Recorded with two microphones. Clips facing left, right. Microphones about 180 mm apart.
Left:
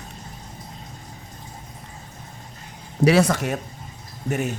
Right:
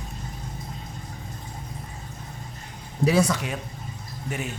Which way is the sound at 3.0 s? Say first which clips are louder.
Left 4 dB; 75° left (ahead or behind).